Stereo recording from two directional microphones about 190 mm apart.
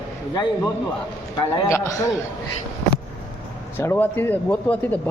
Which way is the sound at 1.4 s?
20° left (ahead or behind).